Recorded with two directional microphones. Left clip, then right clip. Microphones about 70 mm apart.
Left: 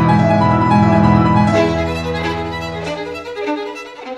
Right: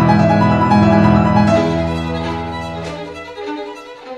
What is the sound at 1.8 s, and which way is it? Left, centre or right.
Music, right.